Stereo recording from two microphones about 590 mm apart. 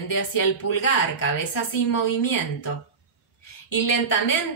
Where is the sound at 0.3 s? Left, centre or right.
Left.